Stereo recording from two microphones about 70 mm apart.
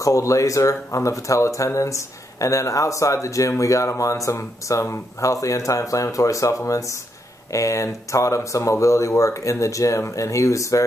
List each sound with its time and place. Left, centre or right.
0.0 s speech: left